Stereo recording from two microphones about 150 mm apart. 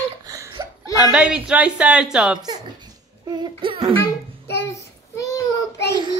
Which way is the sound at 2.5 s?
30° right (ahead or behind).